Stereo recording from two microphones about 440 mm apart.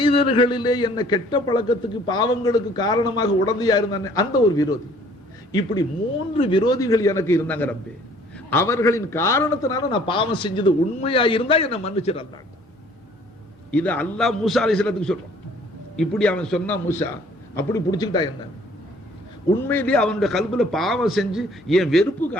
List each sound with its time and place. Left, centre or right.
0.0 s a man's voice: centre
13.7 s a man's voice: centre
19.6 s a man's voice: centre